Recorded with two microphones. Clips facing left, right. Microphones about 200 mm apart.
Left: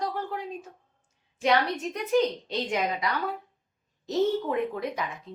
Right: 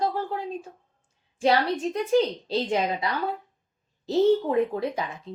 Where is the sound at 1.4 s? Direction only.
30° right (ahead or behind).